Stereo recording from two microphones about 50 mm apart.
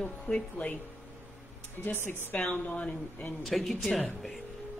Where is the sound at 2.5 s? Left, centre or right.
Left.